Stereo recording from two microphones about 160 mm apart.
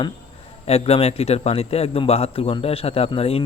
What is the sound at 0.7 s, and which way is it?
Speech, 40° left (ahead or behind).